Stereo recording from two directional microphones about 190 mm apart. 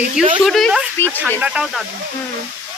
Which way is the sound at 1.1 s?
10° right (ahead or behind).